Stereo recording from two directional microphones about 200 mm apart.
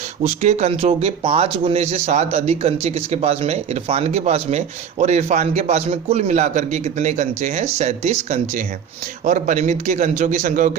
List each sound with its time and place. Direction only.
0.2 s speech: 35° right (ahead or behind)